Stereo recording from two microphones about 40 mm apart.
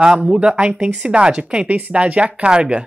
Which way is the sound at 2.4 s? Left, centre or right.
Right.